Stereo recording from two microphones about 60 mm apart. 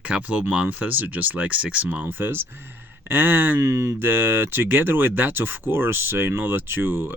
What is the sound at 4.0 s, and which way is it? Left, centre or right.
Speech, right.